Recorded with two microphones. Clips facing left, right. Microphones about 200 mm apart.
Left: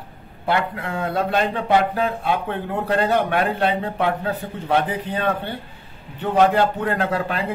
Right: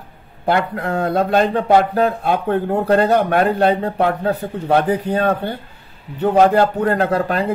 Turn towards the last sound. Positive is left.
turn(degrees=-45)  # may be behind; listen again after turning